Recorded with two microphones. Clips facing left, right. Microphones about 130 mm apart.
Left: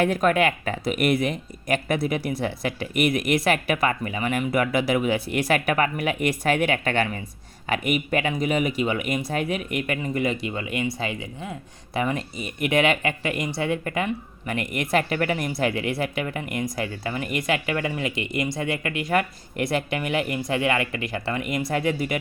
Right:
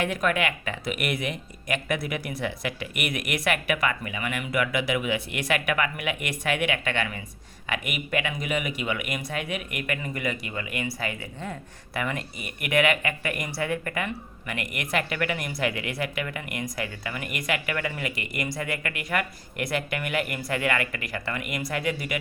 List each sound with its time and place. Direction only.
0.0 s speech: 35° left (ahead or behind); by 11.5 s 15° left (ahead or behind)
11.9 s speech: 30° left (ahead or behind)